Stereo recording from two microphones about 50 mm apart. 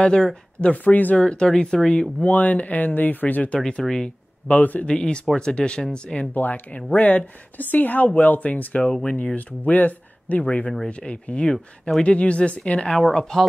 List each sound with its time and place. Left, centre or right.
0.0 s speech: centre
0.8 s speech: left
1.2 s speech: centre
2.2 s speech: left
3.5 s speech: centre
4.5 s speech: left
4.8 s speech: centre
6.3 s speech: left
12.9 s speech: centre